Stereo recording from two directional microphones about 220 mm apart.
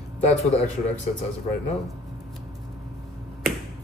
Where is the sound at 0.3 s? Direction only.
30° left (ahead or behind).